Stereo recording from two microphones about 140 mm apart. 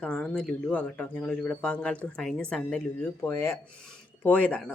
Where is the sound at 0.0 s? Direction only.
5° left (ahead or behind).